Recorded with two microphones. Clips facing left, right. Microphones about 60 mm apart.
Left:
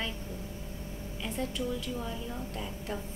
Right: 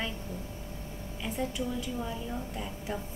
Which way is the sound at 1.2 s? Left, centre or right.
Centre.